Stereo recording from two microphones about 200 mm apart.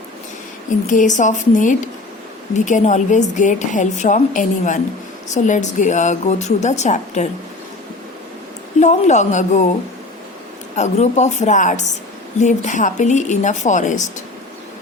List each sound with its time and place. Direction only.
0.9 s a woman's voice: 40° left (ahead or behind)
8.8 s a woman's voice: 35° left (ahead or behind)
10.8 s a woman's voice: 35° left (ahead or behind)